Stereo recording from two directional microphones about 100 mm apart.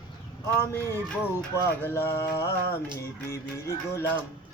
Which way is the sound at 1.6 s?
25° left (ahead or behind).